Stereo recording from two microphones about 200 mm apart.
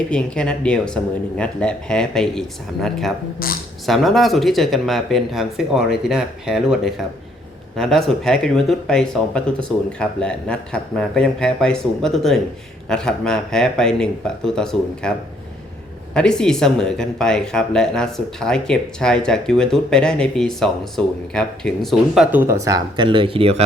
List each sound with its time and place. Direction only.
0.1 s speech: 5° left (ahead or behind)
3.4 s speech: 45° left (ahead or behind)
3.8 s speech: centre (ahead or behind)
16.1 s speech: 5° left (ahead or behind); by 23.6 s 30° right (ahead or behind)